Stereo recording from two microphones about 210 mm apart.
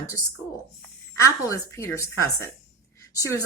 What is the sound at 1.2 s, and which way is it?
A woman's voice, 15° left (ahead or behind).